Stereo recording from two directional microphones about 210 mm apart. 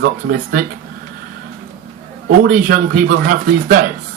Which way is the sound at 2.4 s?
40° right (ahead or behind).